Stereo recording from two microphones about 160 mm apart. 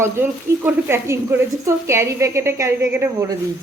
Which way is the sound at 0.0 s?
15° right (ahead or behind).